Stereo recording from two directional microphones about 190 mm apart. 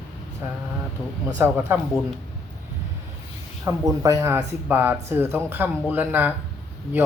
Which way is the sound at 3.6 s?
15° right (ahead or behind).